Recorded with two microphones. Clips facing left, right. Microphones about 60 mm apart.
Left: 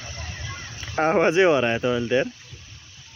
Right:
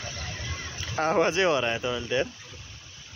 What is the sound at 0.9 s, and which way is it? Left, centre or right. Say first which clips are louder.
Speech: left 5 dB; left.